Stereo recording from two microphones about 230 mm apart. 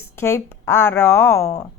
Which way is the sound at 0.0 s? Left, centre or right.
Centre.